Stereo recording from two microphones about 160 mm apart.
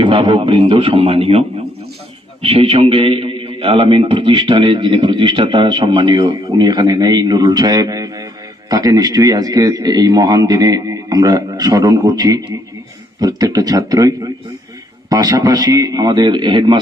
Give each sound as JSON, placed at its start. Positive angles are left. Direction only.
{"t": 0.0, "sound": "a man's voice", "side_deg": -30}
{"t": 15.1, "sound": "a man's voice", "side_deg": -20}